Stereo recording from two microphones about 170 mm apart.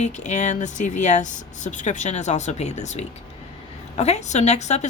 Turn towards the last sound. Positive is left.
turn(degrees=40)  # may be behind; listen again after turning